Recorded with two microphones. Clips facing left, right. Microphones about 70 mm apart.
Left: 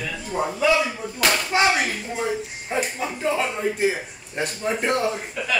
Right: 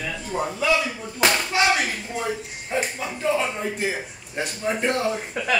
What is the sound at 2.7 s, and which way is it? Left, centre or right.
Speech, centre.